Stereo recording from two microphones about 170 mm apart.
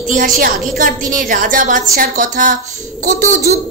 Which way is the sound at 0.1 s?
55° right (ahead or behind).